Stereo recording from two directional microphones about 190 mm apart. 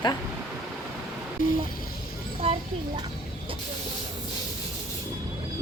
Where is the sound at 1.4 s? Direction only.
45° left (ahead or behind).